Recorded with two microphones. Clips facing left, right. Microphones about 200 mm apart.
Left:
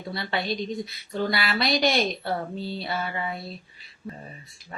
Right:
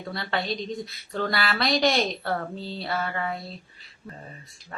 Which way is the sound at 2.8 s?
5° left (ahead or behind).